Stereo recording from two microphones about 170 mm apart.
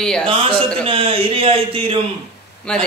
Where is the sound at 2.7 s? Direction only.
5° left (ahead or behind).